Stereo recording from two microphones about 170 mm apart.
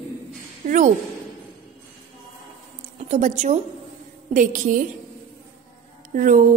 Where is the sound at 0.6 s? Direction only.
45° right (ahead or behind).